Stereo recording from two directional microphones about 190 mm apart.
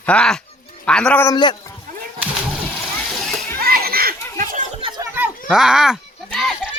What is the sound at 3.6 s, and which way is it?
Children playing, 50° right (ahead or behind).